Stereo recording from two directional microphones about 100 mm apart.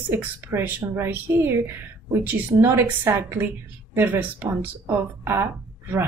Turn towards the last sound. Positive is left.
turn(degrees=-20)  # may be behind; listen again after turning